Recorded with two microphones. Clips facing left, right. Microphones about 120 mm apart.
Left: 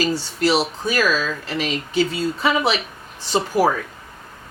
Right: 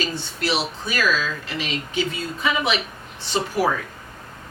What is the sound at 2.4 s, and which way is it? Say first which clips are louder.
Speech: left 3 dB; 35° left (ahead or behind).